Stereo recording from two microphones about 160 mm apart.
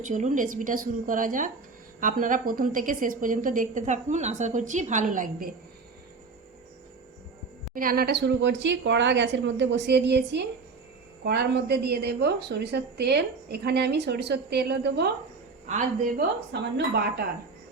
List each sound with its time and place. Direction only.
0.0 s a woman's voice: 50° right (ahead or behind)
7.7 s a woman's voice: 60° right (ahead or behind); by 15.0 s 90° right
15.6 s speech: 55° right (ahead or behind); by 17.2 s 90° right